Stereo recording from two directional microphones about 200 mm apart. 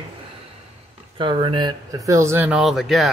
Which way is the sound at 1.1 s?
25° right (ahead or behind).